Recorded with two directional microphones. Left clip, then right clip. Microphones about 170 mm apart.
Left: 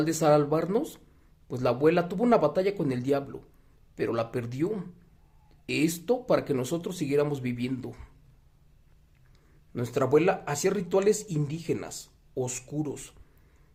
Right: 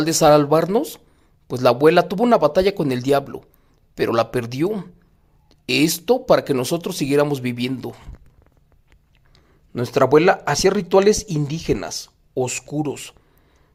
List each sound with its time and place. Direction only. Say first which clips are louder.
0.0 s speech: right 9 dB; 30° right (ahead or behind)
9.7 s speech: right 9 dB; 35° right (ahead or behind)